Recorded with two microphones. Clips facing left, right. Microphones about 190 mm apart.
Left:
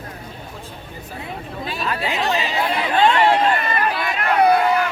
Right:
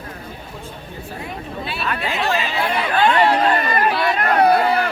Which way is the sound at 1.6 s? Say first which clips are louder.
Left 1 dB; 40° left (ahead or behind).